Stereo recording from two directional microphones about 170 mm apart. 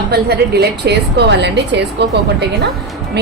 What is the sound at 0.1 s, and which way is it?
A woman's voice, 70° right (ahead or behind).